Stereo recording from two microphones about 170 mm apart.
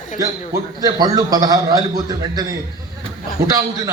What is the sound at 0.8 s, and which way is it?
A man's voice, 20° right (ahead or behind).